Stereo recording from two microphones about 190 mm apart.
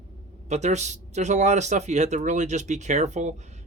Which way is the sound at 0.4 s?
35° right (ahead or behind).